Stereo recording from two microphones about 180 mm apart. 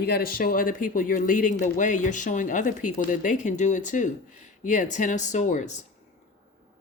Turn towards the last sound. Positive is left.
turn(degrees=45)  # may be behind; listen again after turning